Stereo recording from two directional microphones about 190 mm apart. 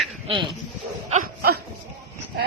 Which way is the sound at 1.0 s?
45° right (ahead or behind).